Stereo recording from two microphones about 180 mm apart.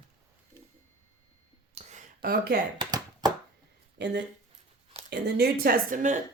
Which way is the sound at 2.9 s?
20° right (ahead or behind).